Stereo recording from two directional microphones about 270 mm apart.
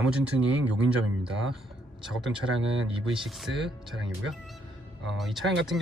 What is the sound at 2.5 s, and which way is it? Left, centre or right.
Speech, right.